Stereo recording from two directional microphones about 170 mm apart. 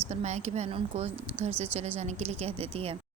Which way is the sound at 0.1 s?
40° right (ahead or behind).